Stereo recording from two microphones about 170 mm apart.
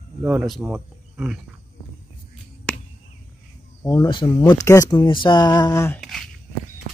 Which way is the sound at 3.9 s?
25° left (ahead or behind).